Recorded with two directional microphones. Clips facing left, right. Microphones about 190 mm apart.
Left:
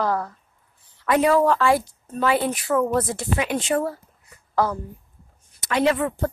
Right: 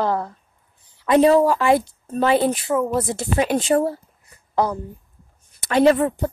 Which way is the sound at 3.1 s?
30° right (ahead or behind).